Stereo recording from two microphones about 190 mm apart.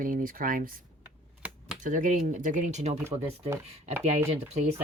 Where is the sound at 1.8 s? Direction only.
45° right (ahead or behind).